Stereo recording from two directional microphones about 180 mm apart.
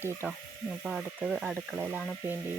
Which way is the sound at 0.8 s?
5° right (ahead or behind).